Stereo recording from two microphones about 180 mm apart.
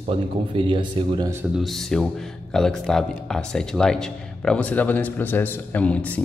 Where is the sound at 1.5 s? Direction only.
Centre (ahead or behind).